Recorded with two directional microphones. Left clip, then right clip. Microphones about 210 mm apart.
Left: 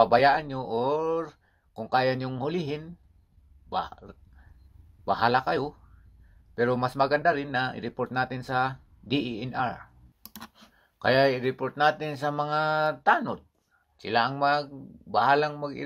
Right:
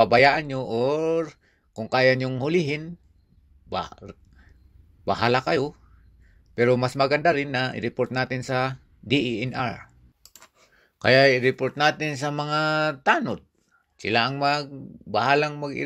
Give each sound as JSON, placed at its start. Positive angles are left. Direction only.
{"t": 0.0, "sound": "speech", "side_deg": -30}
{"t": 11.0, "sound": "speech", "side_deg": -25}